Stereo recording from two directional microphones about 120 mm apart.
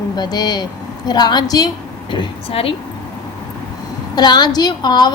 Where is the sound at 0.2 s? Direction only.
35° left (ahead or behind).